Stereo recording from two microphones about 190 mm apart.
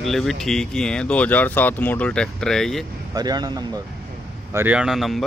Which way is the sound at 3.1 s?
20° right (ahead or behind).